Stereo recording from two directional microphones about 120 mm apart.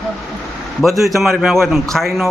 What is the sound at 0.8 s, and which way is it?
A man's voice, centre (ahead or behind).